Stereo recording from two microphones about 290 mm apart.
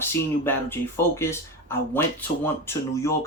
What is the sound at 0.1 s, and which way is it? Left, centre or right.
Speech, centre.